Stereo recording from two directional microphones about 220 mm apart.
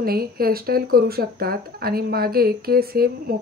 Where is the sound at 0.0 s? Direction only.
45° right (ahead or behind).